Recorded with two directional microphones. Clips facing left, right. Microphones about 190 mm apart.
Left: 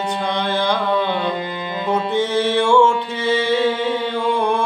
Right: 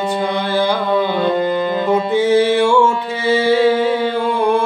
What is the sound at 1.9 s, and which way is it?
Music, 10° right (ahead or behind).